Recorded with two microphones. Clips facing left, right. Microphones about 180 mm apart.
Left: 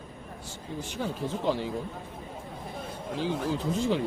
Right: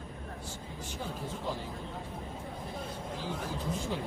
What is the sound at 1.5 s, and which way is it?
Speech, 85° left.